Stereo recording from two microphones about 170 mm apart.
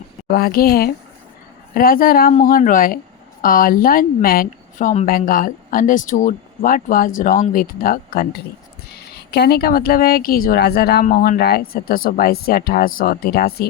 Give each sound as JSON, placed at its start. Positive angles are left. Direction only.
{"t": 0.3, "sound": "a woman's voice", "side_deg": 60}
{"t": 11.0, "sound": "speech", "side_deg": 60}